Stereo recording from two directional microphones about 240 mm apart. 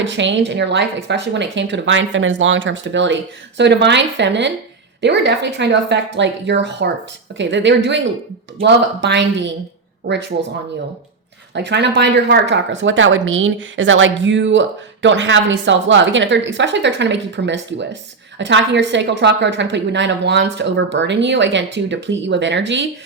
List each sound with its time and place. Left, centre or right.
0.0 s speech: right
11.5 s speech: right